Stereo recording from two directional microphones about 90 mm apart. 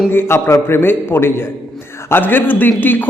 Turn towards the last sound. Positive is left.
turn(degrees=20)  # may be behind; listen again after turning